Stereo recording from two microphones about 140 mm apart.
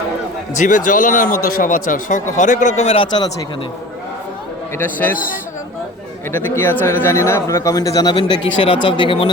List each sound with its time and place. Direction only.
0.5 s speech: 65° left (ahead or behind); by 3.2 s 35° left (ahead or behind)
4.8 s a man's voice: 15° left (ahead or behind)
5.1 s a man's voice: 90° left
6.3 s speech: 15° left (ahead or behind)
8.1 s speech: 40° left (ahead or behind)